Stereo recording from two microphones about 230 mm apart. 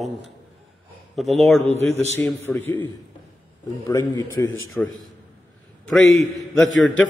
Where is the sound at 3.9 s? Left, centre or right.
Centre.